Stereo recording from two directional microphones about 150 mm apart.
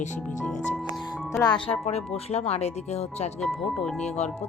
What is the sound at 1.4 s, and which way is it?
A woman's voice, 35° left (ahead or behind).